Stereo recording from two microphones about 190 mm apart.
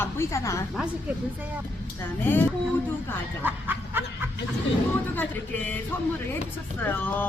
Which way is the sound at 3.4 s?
10° right (ahead or behind).